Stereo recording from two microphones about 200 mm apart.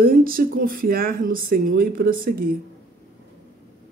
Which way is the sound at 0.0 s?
45° right (ahead or behind).